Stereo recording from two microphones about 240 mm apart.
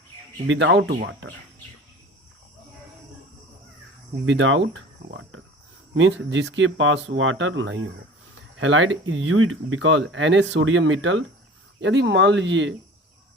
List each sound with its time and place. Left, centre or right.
0.4 s speech: right
4.3 s speech: right